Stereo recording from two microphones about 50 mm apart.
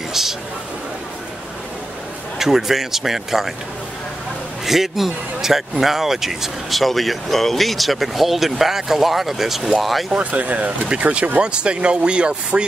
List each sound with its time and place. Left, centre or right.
0.1 s a sound: centre
2.3 s speech: centre
4.6 s speech: centre
10.3 s speech: right